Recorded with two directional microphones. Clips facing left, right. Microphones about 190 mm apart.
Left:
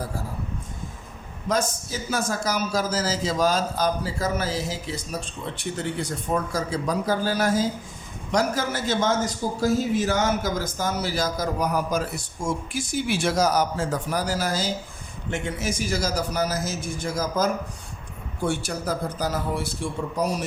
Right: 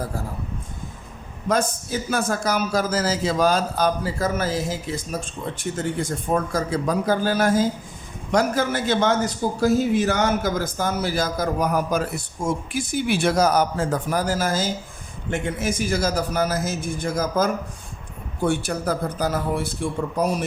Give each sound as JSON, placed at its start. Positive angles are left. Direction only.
{"t": 1.5, "sound": "a man's voice", "side_deg": -55}